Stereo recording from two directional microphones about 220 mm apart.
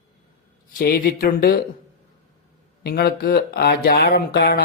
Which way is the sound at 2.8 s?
45° left (ahead or behind).